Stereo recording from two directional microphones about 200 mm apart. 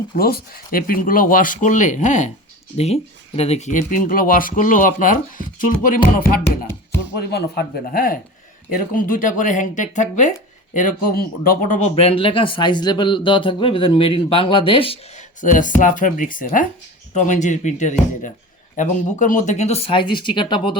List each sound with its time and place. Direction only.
0.2 s speech: 50° left (ahead or behind)
11.9 s speech: 30° left (ahead or behind)
15.4 s speech: 40° left (ahead or behind); by 20.7 s 25° left (ahead or behind)